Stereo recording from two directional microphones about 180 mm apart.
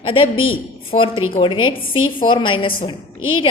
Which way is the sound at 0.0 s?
30° left (ahead or behind).